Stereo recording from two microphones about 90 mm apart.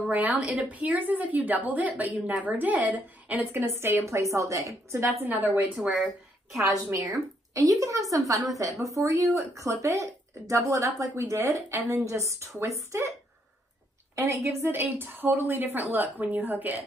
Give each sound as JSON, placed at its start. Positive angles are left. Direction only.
{"t": 0.1, "sound": "speech", "side_deg": -15}
{"t": 3.6, "sound": "speech", "side_deg": -30}
{"t": 5.3, "sound": "a woman's voice", "side_deg": -20}
{"t": 6.6, "sound": "speech", "side_deg": -35}
{"t": 14.1, "sound": "a woman's voice", "side_deg": -35}